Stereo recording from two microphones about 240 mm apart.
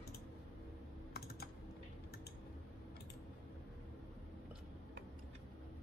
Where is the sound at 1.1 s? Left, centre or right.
Left.